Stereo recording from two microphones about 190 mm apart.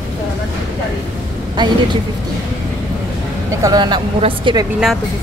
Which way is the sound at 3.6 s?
20° right (ahead or behind).